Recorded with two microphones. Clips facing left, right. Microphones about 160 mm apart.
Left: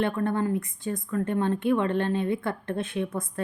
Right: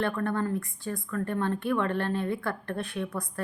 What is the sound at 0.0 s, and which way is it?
A woman's voice, 20° left (ahead or behind).